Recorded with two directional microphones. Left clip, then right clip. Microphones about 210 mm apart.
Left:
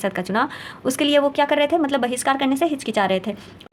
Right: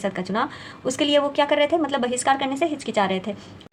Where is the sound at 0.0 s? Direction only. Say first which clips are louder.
Left 3 dB; 35° left (ahead or behind).